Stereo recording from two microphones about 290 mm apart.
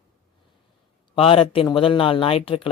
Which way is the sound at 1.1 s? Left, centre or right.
Centre.